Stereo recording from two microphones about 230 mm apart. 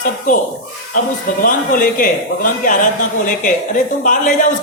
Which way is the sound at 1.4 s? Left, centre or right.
Left.